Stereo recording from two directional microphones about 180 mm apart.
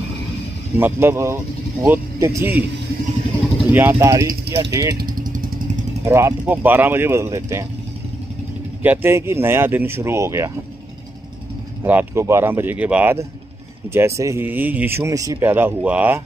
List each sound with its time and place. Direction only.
0.7 s speech: 10° right (ahead or behind)
3.7 s speech: 15° right (ahead or behind)
5.1 s vehicle: 50° right (ahead or behind)
6.0 s speech: 15° right (ahead or behind)
8.8 s speech: 10° right (ahead or behind)
11.8 s speech: 10° right (ahead or behind)